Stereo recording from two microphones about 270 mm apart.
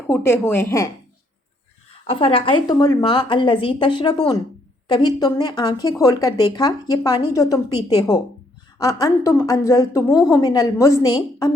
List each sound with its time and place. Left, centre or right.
0.1 s a woman's voice: centre
2.0 s a woman's voice: centre